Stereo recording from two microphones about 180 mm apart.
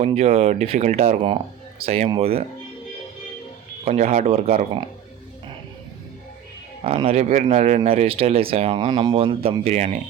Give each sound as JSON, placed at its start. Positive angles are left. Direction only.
{"t": 0.0, "sound": "speech", "side_deg": -35}
{"t": 3.8, "sound": "speech", "side_deg": -40}
{"t": 6.8, "sound": "speech", "side_deg": -35}